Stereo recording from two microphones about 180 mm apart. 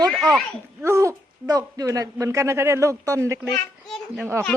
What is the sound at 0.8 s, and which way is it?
A woman's voice, 15° right (ahead or behind).